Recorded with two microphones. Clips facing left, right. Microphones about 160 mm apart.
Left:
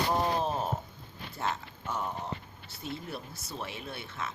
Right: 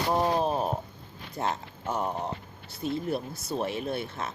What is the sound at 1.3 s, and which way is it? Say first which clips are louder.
Speech: right 4 dB; 35° right (ahead or behind).